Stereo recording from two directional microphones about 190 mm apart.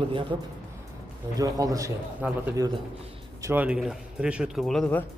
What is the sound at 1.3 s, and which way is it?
A man's voice, 20° right (ahead or behind).